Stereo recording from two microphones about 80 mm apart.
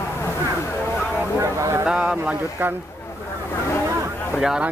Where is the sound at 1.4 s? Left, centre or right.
Right.